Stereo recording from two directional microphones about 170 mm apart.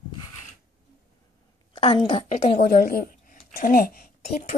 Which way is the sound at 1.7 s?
35° left (ahead or behind).